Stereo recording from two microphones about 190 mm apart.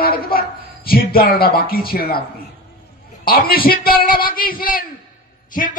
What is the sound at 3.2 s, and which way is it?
A man's voice, 55° left (ahead or behind).